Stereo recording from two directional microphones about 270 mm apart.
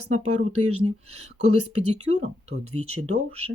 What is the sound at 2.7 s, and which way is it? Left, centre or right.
Speech, right.